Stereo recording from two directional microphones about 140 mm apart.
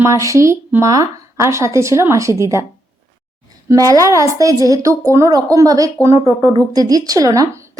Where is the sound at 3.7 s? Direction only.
25° right (ahead or behind).